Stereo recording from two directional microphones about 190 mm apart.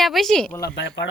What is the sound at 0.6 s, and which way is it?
Speech, 60° left (ahead or behind).